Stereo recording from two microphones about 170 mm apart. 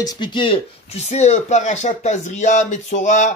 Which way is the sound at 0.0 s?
25° left (ahead or behind).